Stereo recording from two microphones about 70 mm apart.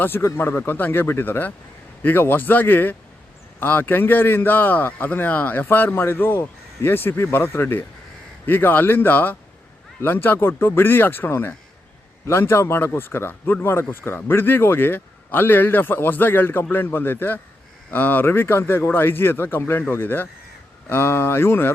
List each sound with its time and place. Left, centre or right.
0.0 s a man's voice: left